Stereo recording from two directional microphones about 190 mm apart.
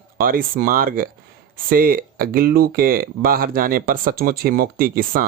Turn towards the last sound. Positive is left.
turn(degrees=-50)  # may be behind; listen again after turning